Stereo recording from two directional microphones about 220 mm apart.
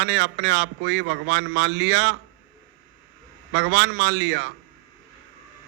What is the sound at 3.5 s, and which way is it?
A man's voice, 55° right (ahead or behind).